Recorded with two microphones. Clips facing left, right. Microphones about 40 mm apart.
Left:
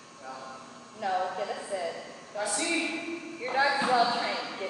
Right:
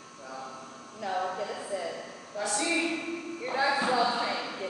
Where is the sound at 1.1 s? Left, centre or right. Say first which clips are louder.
Even; centre.